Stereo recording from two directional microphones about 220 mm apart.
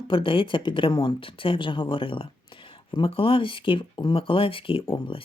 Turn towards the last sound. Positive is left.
turn(degrees=25)  # may be behind; listen again after turning